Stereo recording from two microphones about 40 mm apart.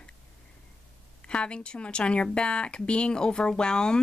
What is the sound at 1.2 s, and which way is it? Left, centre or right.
Speech, left.